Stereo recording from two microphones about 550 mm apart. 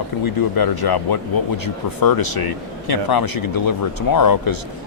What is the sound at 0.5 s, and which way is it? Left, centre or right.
Speech, left.